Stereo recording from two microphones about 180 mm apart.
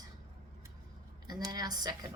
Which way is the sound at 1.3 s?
20° right (ahead or behind).